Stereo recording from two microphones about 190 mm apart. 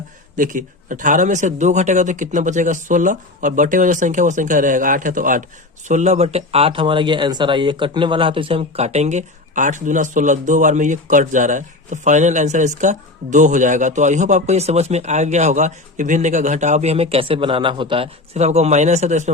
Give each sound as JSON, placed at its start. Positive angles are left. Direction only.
{"t": 0.3, "sound": "speech", "side_deg": -45}